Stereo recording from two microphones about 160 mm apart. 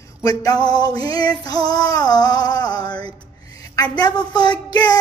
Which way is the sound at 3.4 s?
20° left (ahead or behind).